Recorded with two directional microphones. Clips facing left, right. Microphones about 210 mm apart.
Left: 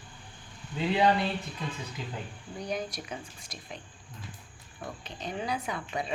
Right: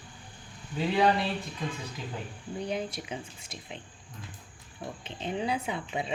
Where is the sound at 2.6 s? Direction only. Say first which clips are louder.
Right 1 dB; 25° right (ahead or behind).